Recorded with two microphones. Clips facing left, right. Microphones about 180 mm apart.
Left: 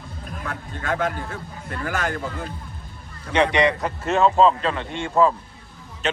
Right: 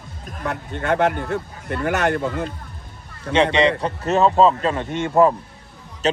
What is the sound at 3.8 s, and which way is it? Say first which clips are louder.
Speech: right 2 dB; 35° right (ahead or behind).